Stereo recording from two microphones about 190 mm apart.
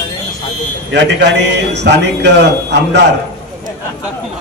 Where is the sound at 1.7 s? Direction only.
65° right (ahead or behind).